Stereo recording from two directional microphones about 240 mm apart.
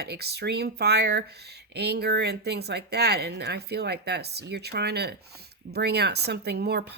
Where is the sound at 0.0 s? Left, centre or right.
Right.